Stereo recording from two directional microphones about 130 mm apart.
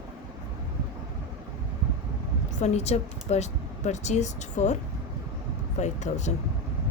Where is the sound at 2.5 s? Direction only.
60° left (ahead or behind).